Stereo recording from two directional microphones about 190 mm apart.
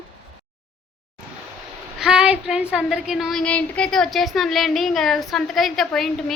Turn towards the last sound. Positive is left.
turn(degrees=0)  # may be behind; listen again after turning